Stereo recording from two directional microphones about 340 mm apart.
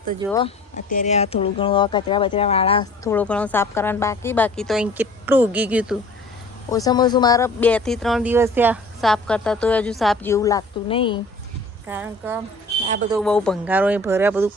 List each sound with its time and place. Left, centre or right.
0.3 s speech: centre
6.7 s speech: centre
11.9 s speech: centre
12.8 s speech: right
13.1 s speech: centre